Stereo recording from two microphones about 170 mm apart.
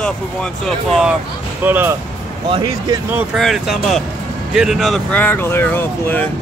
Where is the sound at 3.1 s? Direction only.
5° right (ahead or behind).